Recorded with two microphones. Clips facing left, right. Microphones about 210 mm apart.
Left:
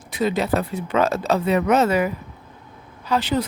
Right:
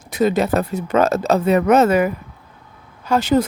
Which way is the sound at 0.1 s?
45° right (ahead or behind).